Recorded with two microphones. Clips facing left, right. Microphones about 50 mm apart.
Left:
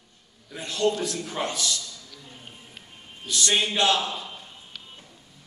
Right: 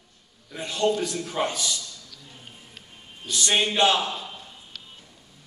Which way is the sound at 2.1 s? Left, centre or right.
Centre.